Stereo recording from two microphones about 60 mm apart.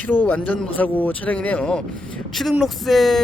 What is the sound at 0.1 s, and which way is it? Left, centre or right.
Speech, left.